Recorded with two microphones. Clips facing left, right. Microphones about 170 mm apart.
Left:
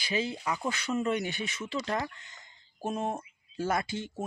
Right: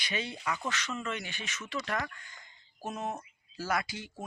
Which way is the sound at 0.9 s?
40° left (ahead or behind).